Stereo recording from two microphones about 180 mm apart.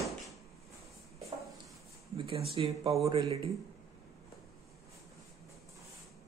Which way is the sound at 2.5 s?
30° right (ahead or behind).